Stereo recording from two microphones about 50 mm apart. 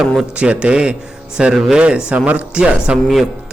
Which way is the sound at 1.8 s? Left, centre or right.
Right.